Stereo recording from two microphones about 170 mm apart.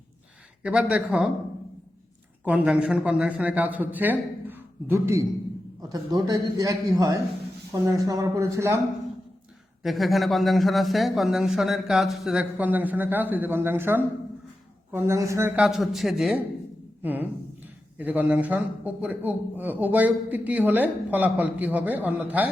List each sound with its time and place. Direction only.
0.6 s a man's voice: 5° right (ahead or behind)
2.4 s a man's voice: 5° right (ahead or behind)
9.8 s a man's voice: centre (ahead or behind)